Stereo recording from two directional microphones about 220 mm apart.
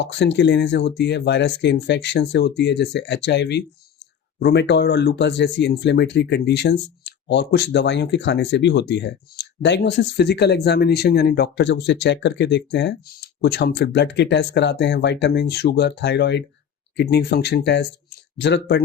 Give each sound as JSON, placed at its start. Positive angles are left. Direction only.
{"t": 0.0, "sound": "speech", "side_deg": 50}